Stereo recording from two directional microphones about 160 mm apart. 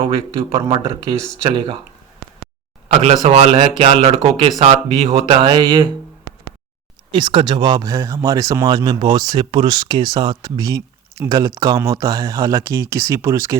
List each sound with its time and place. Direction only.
0.0 s speech: 35° right (ahead or behind)
2.9 s speech: 40° right (ahead or behind)
7.1 s speech: 30° right (ahead or behind)